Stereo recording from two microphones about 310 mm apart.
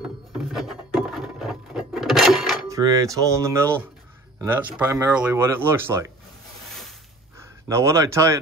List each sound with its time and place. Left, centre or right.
0.5 s wood: centre
2.8 s speech: centre
7.3 s speech: centre